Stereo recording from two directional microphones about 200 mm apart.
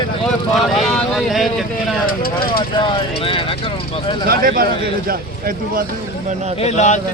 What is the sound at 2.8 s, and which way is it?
Speech, 25° left (ahead or behind).